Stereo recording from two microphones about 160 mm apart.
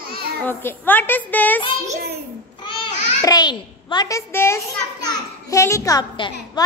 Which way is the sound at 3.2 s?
25° left (ahead or behind).